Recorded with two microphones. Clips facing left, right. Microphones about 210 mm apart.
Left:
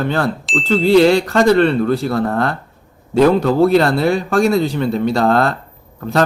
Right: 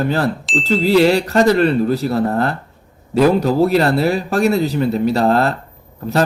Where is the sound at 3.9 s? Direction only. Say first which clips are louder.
Even; 5° right (ahead or behind).